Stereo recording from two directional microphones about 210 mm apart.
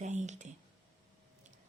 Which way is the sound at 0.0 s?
35° right (ahead or behind).